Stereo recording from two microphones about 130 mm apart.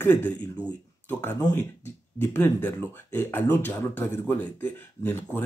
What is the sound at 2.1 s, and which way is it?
Speech, 15° left (ahead or behind).